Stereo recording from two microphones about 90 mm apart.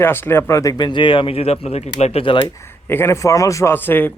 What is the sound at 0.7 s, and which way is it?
Speech, 60° left (ahead or behind).